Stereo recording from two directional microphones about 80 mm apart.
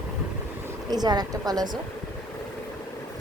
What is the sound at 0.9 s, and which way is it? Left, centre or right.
Speech, right.